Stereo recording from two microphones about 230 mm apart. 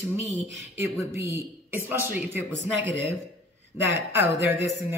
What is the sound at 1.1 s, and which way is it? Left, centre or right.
A woman's voice, centre.